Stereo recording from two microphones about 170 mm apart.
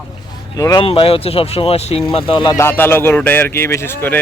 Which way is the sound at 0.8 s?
35° left (ahead or behind).